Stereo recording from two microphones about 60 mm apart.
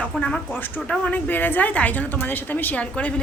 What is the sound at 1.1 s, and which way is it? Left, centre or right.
A woman's voice, left.